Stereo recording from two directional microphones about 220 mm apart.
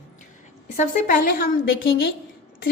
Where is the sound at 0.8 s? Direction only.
40° left (ahead or behind).